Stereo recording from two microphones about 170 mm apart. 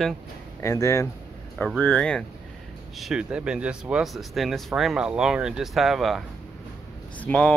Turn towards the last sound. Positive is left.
turn(degrees=5)  # may be behind; listen again after turning